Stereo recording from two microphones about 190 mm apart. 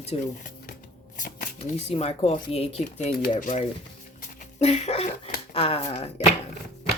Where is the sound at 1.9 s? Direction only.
35° left (ahead or behind).